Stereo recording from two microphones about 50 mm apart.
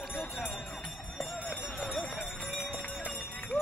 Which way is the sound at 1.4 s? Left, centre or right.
Centre.